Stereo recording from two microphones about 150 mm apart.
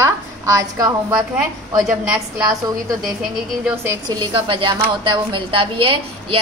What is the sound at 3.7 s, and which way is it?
Speech, 15° right (ahead or behind).